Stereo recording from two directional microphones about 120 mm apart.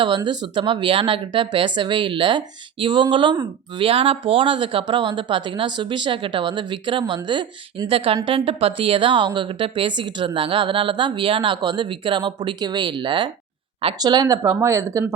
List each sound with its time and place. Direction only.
0.0 s speech: 40° right (ahead or behind)